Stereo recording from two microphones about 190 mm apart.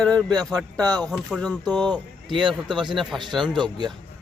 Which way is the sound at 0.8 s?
20° right (ahead or behind).